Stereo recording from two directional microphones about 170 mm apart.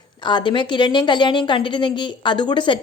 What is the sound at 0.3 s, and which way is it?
A woman's voice, 25° left (ahead or behind).